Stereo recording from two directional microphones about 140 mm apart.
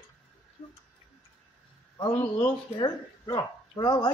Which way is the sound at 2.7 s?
30° left (ahead or behind).